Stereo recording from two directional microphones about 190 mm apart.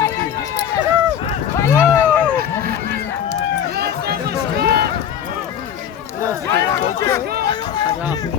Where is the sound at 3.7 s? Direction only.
55° right (ahead or behind).